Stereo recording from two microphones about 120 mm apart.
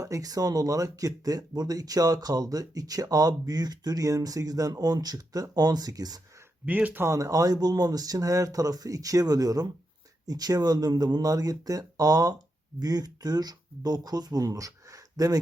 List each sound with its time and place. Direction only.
0.0 s speech: 30° right (ahead or behind)
6.7 s speech: 15° right (ahead or behind); by 15.4 s 30° right (ahead or behind)